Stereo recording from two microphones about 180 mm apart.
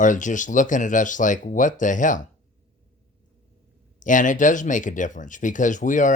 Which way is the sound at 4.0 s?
45° left (ahead or behind).